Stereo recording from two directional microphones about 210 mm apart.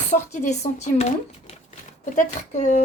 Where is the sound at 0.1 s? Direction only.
35° left (ahead or behind).